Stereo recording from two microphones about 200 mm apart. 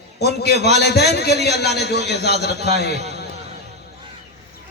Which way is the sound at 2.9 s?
35° right (ahead or behind).